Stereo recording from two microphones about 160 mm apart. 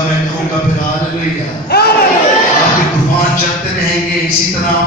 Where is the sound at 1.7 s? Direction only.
80° left.